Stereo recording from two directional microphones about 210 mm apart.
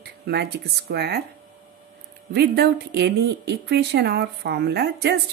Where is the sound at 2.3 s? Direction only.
50° right (ahead or behind).